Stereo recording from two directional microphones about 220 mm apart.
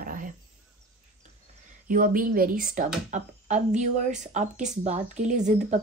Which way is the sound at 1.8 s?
40° right (ahead or behind).